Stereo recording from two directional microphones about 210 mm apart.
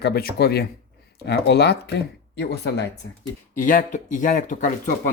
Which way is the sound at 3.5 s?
40° left (ahead or behind).